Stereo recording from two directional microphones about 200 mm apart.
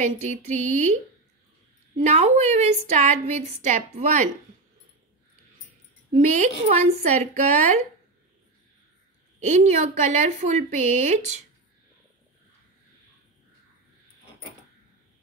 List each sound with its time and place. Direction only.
0.0 s a woman's voice: 35° right (ahead or behind)
2.0 s a woman's voice: 35° right (ahead or behind)
6.1 s a woman's voice: 35° right (ahead or behind)
9.4 s a woman's voice: 35° right (ahead or behind)